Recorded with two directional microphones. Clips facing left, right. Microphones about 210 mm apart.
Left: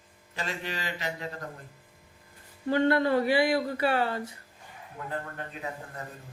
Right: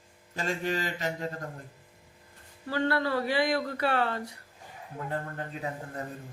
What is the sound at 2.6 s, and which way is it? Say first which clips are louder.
Speech: left 4 dB; 20° left (ahead or behind).